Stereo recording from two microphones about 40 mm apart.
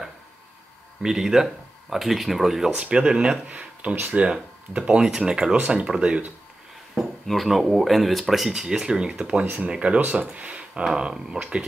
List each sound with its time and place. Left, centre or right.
1.0 s speech: centre
2.8 s speech: right
4.3 s speech: right
7.4 s speech: centre
9.2 s speech: right
9.9 s speech: right; by 11.6 s centre